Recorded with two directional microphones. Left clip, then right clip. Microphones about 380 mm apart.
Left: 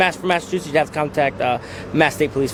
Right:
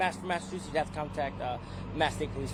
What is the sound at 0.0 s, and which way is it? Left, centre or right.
Speech, right.